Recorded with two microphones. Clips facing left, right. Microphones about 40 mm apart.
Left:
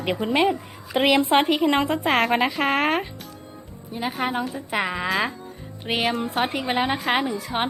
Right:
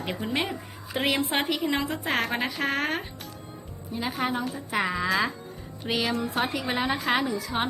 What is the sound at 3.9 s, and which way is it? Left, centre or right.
A woman's voice, left.